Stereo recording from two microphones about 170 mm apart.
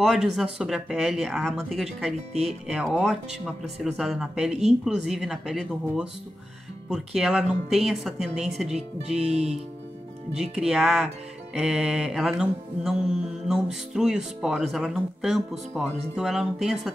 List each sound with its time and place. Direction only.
0.0 s speech: 5° right (ahead or behind)
9.2 s speech: 40° right (ahead or behind)
10.3 s speech: centre (ahead or behind)